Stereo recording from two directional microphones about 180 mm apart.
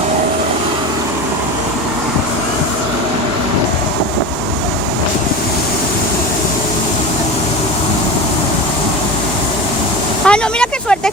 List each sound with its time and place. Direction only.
10.2 s vehicle: 5° left (ahead or behind)